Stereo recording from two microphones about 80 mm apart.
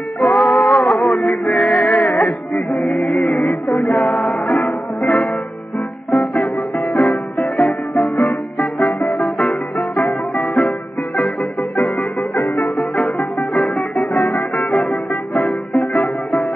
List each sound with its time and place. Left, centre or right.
0.2 s music: centre
12.4 s music: left
12.6 s music: centre